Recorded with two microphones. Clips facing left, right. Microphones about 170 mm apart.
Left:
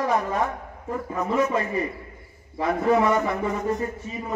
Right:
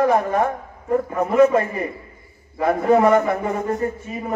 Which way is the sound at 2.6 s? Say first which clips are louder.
Right 5 dB; 55° right (ahead or behind).